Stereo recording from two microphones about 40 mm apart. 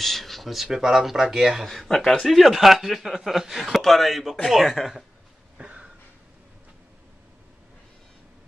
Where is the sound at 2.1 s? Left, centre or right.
Centre.